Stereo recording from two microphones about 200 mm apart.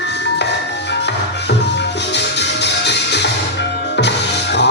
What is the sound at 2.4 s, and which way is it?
Music, 60° left (ahead or behind).